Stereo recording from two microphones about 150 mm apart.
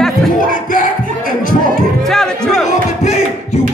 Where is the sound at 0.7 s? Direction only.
65° left (ahead or behind).